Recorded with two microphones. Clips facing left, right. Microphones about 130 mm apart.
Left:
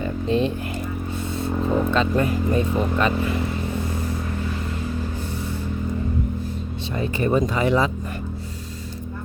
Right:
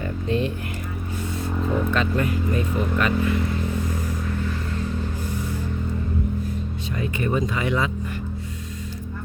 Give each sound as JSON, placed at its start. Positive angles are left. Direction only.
{"t": 0.3, "sound": "speech", "side_deg": 20}
{"t": 1.5, "sound": "speech", "side_deg": 25}
{"t": 7.0, "sound": "speech", "side_deg": 35}